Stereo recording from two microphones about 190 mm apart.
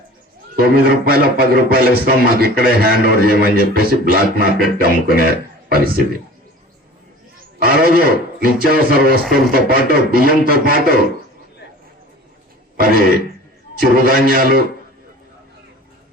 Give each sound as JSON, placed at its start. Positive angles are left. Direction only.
{"t": 0.5, "sound": "a man's voice", "side_deg": -50}
{"t": 7.6, "sound": "a man's voice", "side_deg": -50}
{"t": 12.7, "sound": "throat clearing", "side_deg": -50}
{"t": 13.8, "sound": "a man's voice", "side_deg": -50}